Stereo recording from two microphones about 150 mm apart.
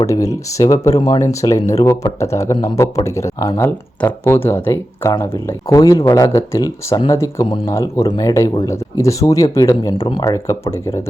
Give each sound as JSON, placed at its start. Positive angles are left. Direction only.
{"t": 0.5, "sound": "speech", "side_deg": 20}
{"t": 10.0, "sound": "speech", "side_deg": 35}
{"t": 10.2, "sound": "speech", "side_deg": 20}